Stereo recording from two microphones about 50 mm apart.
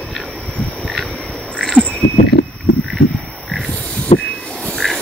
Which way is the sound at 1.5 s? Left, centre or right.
Centre.